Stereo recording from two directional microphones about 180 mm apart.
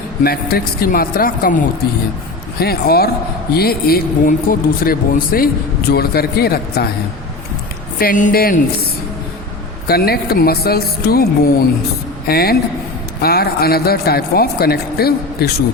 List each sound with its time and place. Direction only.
0.3 s speech: 55° left (ahead or behind)
7.9 s speech: 50° left (ahead or behind)